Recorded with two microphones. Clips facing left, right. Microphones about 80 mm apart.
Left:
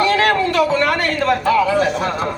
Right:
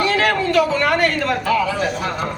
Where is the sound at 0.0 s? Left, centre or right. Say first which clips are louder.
Left 3 dB; left.